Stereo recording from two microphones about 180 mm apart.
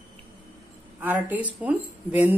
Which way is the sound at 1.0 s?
10° right (ahead or behind).